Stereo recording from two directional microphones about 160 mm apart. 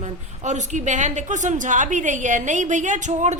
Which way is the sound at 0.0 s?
50° right (ahead or behind).